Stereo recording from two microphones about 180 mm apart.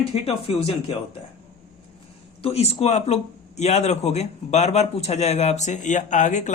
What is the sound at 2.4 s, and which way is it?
Speech, 35° left (ahead or behind).